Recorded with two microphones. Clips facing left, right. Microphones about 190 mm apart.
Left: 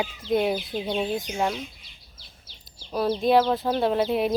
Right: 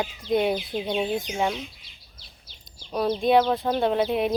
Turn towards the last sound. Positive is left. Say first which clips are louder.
# even
turn(degrees=5)  # may be behind; listen again after turning